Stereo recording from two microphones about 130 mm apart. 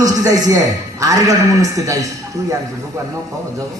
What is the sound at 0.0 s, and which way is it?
A man's voice, 25° right (ahead or behind).